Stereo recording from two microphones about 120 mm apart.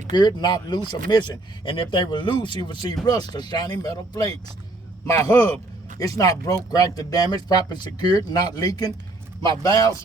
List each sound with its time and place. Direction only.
0.1 s a man's voice: 35° left (ahead or behind)